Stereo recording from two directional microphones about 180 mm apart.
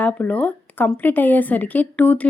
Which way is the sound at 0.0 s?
10° left (ahead or behind).